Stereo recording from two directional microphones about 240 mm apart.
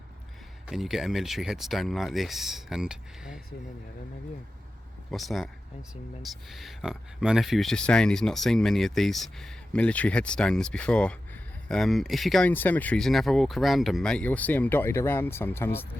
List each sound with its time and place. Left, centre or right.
0.7 s speech: centre
5.1 s speech: centre
6.5 s speech: centre